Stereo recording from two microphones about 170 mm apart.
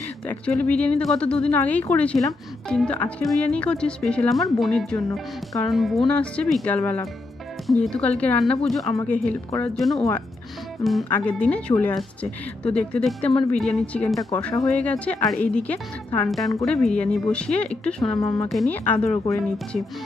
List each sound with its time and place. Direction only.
0.3 s speech: 5° left (ahead or behind)
18.1 s speech: 25° left (ahead or behind)
18.5 s speech: 5° left (ahead or behind)